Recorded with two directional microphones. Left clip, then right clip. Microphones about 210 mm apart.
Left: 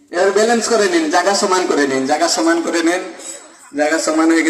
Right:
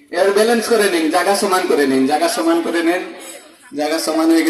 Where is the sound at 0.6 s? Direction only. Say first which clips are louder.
Even; 25° left (ahead or behind).